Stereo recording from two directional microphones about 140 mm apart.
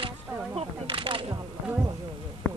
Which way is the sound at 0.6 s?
40° right (ahead or behind).